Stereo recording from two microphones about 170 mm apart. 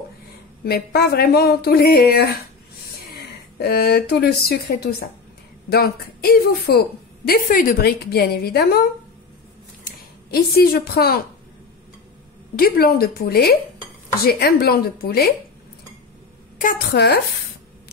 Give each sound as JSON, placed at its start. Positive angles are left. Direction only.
{"t": 0.7, "sound": "a woman's voice", "side_deg": 70}
{"t": 3.5, "sound": "a woman's voice", "side_deg": 70}
{"t": 9.8, "sound": "speech", "side_deg": 65}
{"t": 12.5, "sound": "a woman's voice", "side_deg": 60}
{"t": 16.5, "sound": "speech", "side_deg": 60}